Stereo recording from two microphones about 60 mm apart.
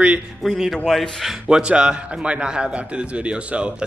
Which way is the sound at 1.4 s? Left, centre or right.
Centre.